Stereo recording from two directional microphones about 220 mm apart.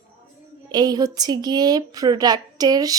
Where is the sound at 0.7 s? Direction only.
15° right (ahead or behind).